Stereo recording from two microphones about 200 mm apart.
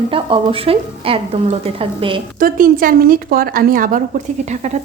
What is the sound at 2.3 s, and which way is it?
A woman's voice, 45° right (ahead or behind).